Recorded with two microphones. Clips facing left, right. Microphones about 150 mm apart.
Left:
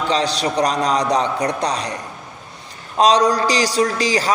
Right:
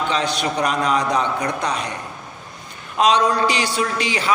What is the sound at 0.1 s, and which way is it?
A man's voice, 35° left (ahead or behind).